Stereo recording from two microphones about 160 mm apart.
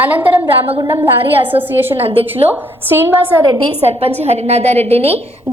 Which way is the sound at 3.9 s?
40° right (ahead or behind).